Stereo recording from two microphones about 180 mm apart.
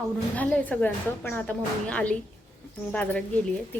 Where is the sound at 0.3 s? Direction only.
10° left (ahead or behind).